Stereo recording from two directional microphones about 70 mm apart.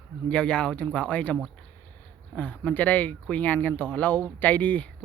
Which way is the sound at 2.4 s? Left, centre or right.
Left.